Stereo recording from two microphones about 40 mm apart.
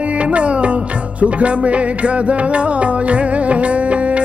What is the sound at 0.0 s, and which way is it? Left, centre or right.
Music, right.